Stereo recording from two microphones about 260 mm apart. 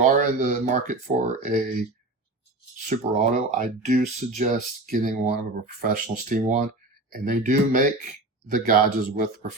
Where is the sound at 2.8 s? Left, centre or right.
Right.